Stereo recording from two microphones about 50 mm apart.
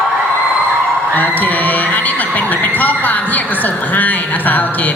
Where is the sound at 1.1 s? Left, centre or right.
Left.